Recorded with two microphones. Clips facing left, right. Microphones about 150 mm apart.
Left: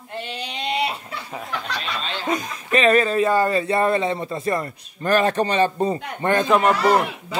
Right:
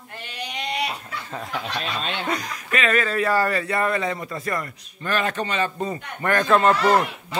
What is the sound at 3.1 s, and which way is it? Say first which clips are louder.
Speech: left 3 dB; 20° left (ahead or behind).